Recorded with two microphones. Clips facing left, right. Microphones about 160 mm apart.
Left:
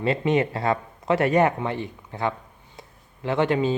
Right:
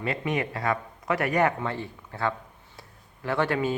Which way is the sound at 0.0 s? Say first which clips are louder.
Left 7 dB; 25° left (ahead or behind).